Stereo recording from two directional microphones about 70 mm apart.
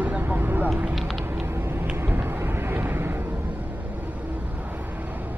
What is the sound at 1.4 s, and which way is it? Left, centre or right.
Vehicle, right.